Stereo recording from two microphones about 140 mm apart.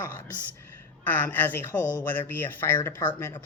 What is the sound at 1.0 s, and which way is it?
Speech, 15° left (ahead or behind).